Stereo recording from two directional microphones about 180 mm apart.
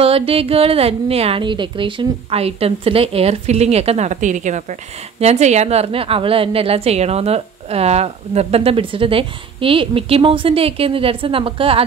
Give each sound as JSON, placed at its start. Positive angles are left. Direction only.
{"t": 0.0, "sound": "a woman's voice", "side_deg": -30}